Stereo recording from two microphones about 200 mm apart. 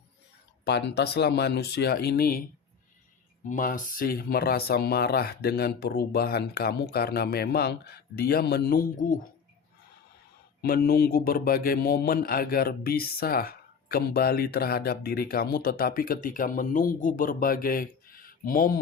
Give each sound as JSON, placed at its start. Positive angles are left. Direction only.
{"t": 0.6, "sound": "speech", "side_deg": 60}
{"t": 3.5, "sound": "a man's voice", "side_deg": 40}
{"t": 10.6, "sound": "a man's voice", "side_deg": 50}